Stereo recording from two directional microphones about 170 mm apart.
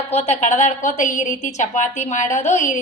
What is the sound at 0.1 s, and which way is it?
A woman's voice, 40° left (ahead or behind).